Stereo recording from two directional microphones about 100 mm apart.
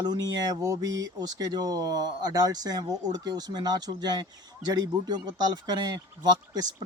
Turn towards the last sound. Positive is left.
turn(degrees=-40)  # may be behind; listen again after turning